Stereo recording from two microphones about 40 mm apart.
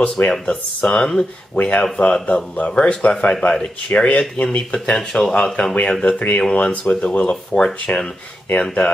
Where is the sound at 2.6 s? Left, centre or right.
Left.